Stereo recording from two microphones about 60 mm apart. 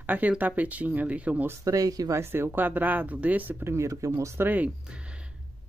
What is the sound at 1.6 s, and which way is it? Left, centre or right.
Speech, right.